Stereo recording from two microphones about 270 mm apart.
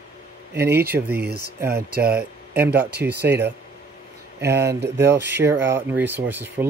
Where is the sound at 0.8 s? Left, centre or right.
Right.